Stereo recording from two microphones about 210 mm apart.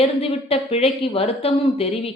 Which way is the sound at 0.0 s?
25° left (ahead or behind).